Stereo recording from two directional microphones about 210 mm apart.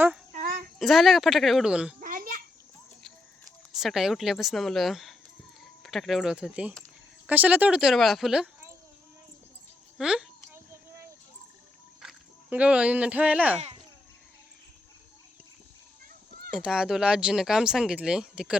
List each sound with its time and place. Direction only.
0.8 s speech: centre (ahead or behind)
2.0 s children playing: 40° right (ahead or behind)
3.0 s speech: centre (ahead or behind)
10.0 s a sound: 5° right (ahead or behind)
12.0 s speech: 5° right (ahead or behind)
16.6 s speech: 5° right (ahead or behind)